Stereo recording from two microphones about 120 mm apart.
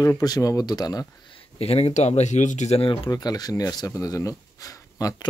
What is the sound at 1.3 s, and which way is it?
A man's voice, 55° left (ahead or behind).